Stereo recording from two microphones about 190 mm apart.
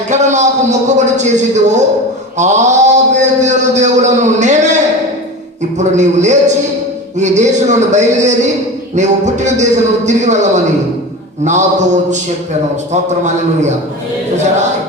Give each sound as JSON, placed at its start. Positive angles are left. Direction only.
{"t": 0.1, "sound": "a man's voice", "side_deg": -40}
{"t": 5.8, "sound": "a man's voice", "side_deg": -40}